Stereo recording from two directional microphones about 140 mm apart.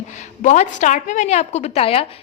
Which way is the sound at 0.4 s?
55° left (ahead or behind).